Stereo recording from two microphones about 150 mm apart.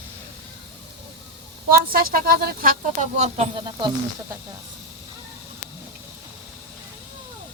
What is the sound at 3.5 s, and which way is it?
Speech, 30° right (ahead or behind).